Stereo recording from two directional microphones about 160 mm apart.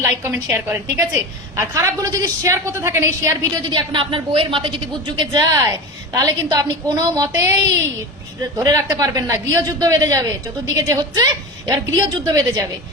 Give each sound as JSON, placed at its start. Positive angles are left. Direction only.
{"t": 0.0, "sound": "a woman's voice", "side_deg": -15}